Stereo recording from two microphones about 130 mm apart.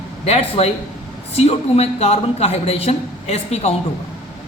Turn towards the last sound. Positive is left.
turn(degrees=55)  # may be behind; listen again after turning